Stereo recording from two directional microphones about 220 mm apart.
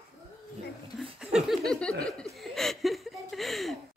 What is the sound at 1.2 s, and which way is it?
Speech, centre (ahead or behind).